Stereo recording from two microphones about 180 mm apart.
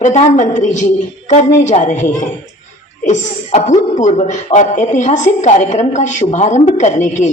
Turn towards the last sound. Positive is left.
turn(degrees=40)  # may be behind; listen again after turning